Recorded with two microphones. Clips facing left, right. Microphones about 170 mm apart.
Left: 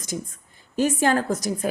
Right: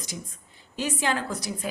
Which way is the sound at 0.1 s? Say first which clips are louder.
Left 13 dB; 50° left (ahead or behind).